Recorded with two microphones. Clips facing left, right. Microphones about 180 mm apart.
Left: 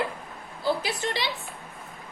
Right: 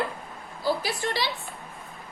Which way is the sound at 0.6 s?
20° left (ahead or behind).